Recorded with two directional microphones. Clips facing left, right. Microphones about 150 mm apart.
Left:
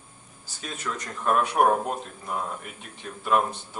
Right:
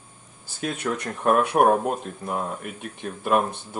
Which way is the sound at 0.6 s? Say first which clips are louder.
Right 7 dB; 65° right (ahead or behind).